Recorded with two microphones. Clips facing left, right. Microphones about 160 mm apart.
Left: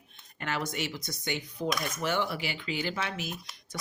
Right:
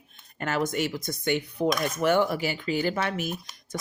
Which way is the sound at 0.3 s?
45° right (ahead or behind).